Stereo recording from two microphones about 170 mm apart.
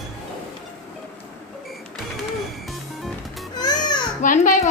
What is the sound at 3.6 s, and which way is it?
Music, 25° left (ahead or behind).